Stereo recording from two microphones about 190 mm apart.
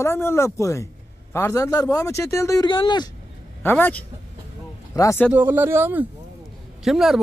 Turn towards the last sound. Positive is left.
turn(degrees=0)  # may be behind; listen again after turning